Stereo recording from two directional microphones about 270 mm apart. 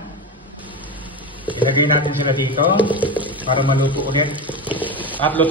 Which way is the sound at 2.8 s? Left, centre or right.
Centre.